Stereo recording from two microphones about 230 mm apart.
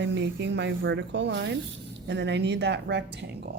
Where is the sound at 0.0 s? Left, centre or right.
Right.